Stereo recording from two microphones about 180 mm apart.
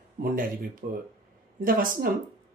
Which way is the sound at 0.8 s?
45° right (ahead or behind).